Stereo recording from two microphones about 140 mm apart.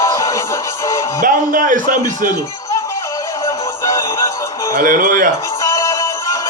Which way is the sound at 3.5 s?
25° left (ahead or behind).